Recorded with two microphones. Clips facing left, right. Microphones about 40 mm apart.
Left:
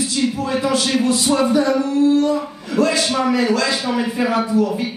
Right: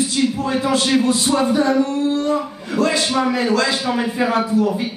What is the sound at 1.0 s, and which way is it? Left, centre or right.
A man's voice, right.